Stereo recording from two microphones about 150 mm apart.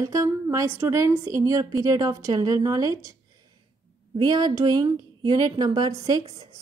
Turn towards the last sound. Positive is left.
turn(degrees=-25)  # may be behind; listen again after turning